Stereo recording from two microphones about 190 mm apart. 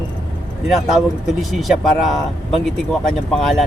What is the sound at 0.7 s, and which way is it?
Speech, centre (ahead or behind).